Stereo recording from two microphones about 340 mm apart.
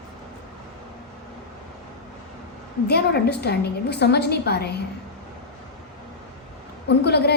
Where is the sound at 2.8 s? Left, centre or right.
Left.